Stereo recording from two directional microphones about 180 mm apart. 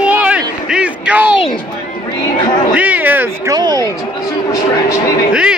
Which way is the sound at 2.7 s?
10° right (ahead or behind).